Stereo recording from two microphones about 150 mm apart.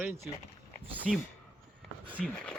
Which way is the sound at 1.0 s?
5° right (ahead or behind).